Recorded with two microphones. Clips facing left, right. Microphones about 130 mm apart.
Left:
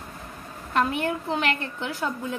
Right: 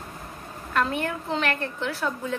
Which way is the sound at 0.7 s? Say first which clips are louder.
Left 1 dB; 15° left (ahead or behind).